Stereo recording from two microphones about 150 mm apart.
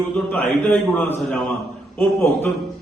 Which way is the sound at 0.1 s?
10° left (ahead or behind).